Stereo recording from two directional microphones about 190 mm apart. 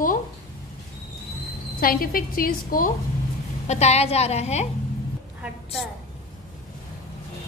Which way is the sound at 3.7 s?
35° left (ahead or behind).